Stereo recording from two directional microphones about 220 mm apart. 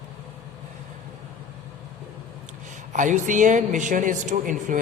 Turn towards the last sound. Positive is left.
turn(degrees=-35)  # may be behind; listen again after turning